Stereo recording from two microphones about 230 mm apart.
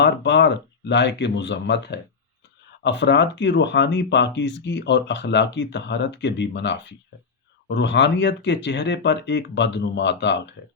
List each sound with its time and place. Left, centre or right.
0.0 s speech: left